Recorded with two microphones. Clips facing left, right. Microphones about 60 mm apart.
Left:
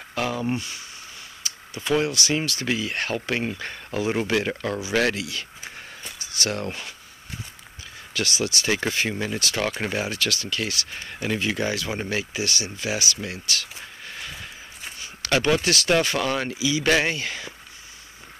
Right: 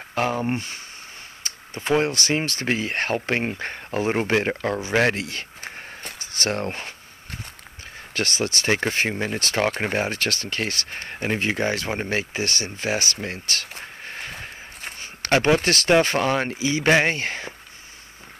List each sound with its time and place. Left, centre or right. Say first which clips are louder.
0.1 s speech: right 2 dB; right
8.1 s speech: right 1 dB; right